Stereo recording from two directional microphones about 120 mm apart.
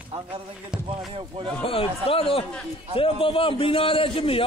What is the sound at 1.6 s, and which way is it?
A man's voice, 50° left (ahead or behind).